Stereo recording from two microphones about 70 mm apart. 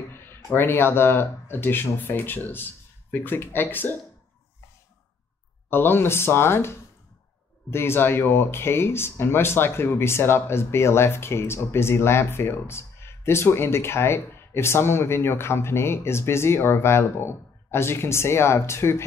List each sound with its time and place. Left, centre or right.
0.1 s speech: left
5.7 s speech: left